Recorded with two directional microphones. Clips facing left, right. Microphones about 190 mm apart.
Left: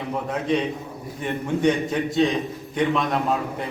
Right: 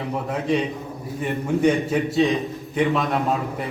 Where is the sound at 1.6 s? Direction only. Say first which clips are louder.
Right 1 dB; 5° right (ahead or behind).